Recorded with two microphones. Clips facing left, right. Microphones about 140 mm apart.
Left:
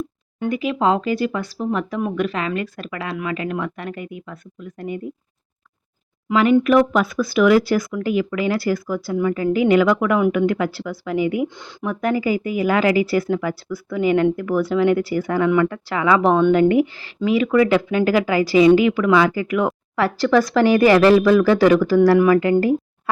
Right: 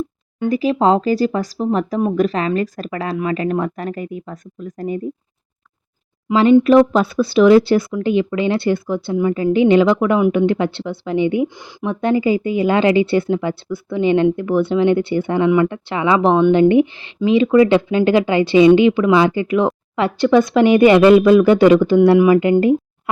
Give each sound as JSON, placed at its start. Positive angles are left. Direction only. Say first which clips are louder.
{"t": 0.4, "sound": "speech", "louder": "right 4 dB", "side_deg": -35}
{"t": 6.2, "sound": "speech", "louder": "right 4 dB", "side_deg": -30}